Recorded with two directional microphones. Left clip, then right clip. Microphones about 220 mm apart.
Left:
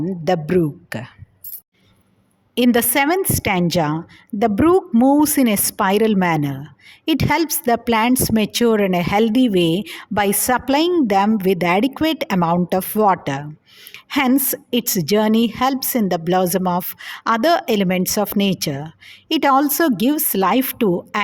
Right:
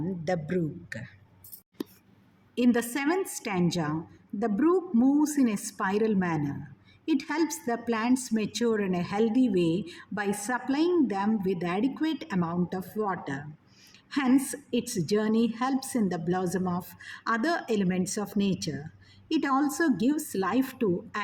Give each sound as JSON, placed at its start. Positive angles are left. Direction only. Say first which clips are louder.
{"t": 0.0, "sound": "a woman's voice", "louder": "left 11 dB", "side_deg": 40}
{"t": 2.6, "sound": "a woman's voice", "louder": "left 11 dB", "side_deg": 45}